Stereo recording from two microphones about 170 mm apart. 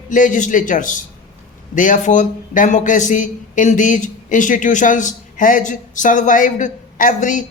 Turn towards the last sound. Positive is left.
turn(degrees=50)  # may be behind; listen again after turning